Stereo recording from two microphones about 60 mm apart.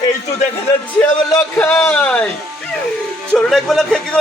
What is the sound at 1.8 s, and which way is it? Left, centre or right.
Speech, left.